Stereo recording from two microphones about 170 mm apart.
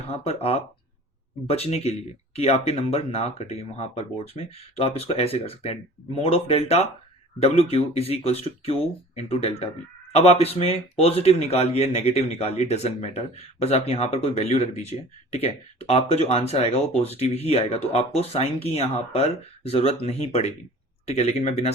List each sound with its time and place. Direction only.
0.1 s speech: 35° left (ahead or behind)